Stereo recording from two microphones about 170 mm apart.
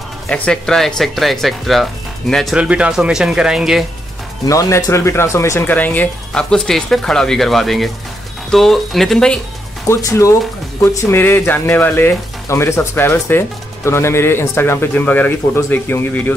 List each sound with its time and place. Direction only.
0.3 s speech: 5° left (ahead or behind)
4.5 s speech: 20° left (ahead or behind); by 9.4 s 5° left (ahead or behind)
9.8 s speech: 15° left (ahead or behind)